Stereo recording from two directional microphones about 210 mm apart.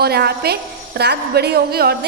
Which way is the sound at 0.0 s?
50° right (ahead or behind).